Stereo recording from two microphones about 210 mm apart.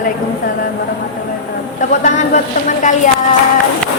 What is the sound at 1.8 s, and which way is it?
A woman's voice, 35° left (ahead or behind).